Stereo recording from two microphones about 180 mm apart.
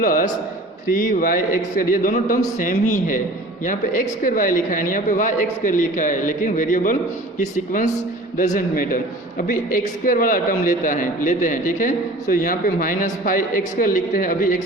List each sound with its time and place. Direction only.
0.0 s a man's voice: 50° left (ahead or behind)